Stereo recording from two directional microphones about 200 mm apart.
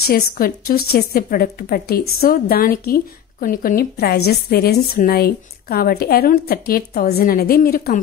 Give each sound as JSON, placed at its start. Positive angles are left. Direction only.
{"t": 0.0, "sound": "a woman's voice", "side_deg": 50}